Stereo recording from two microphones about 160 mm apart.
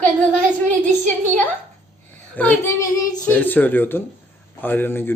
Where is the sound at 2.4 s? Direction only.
15° left (ahead or behind).